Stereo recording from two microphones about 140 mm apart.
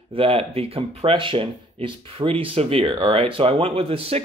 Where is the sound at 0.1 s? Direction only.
40° right (ahead or behind).